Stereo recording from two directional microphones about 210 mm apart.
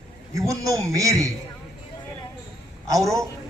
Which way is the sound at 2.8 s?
15° right (ahead or behind).